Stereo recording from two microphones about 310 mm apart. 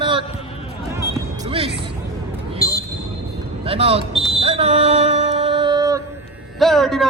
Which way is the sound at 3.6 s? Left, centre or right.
Centre.